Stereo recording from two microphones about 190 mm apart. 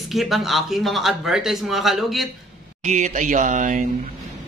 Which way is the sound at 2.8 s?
40° right (ahead or behind).